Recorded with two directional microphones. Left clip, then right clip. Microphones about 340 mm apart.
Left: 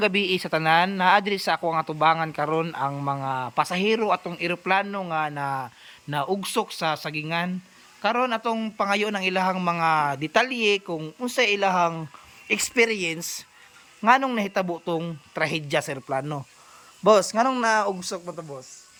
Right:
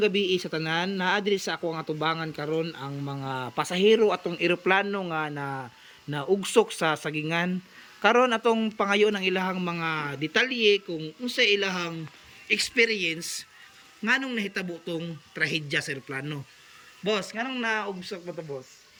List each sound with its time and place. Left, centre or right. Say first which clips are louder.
0.0 s a man's voice: left 2 dB; centre